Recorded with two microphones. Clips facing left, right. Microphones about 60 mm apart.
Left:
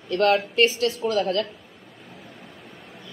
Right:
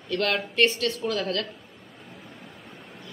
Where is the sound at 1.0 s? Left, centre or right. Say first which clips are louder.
Left 3 dB; centre.